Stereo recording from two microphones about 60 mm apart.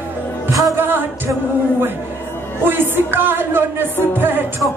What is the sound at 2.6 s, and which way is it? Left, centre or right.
Speech, right.